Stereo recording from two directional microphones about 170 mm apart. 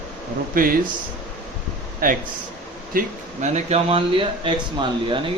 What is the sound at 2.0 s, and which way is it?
Speech, 55° right (ahead or behind).